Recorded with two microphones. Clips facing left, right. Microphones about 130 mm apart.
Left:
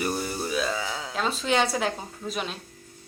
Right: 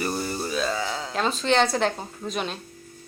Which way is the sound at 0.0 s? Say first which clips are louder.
Right 1 dB; 10° left (ahead or behind).